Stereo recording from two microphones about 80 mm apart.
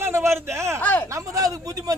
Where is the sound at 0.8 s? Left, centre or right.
Left.